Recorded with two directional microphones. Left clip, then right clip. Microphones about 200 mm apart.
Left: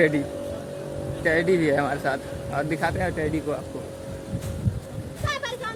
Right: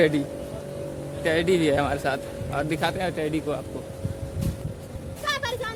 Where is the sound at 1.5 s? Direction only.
Centre (ahead or behind).